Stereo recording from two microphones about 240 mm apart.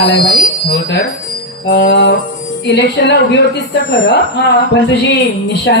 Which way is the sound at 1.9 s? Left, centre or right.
Left.